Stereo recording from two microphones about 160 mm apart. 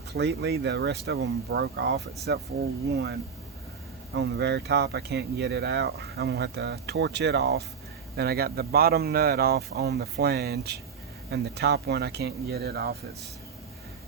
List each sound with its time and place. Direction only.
0.1 s speech: 90° right
4.1 s speech: 90° right